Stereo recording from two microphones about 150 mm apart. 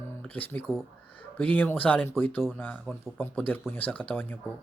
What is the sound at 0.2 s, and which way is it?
Speech, 10° left (ahead or behind).